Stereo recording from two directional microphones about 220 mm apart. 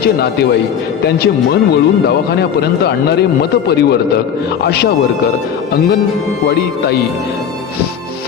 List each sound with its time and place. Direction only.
0.0 s speech: 45° left (ahead or behind)